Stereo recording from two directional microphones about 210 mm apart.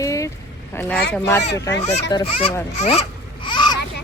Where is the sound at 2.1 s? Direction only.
20° left (ahead or behind).